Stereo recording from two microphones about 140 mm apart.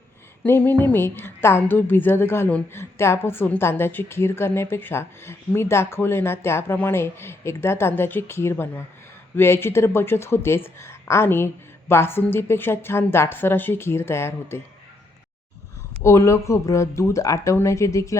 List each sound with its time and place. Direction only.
0.4 s a woman's voice: 15° left (ahead or behind)
16.0 s a woman's voice: 20° left (ahead or behind)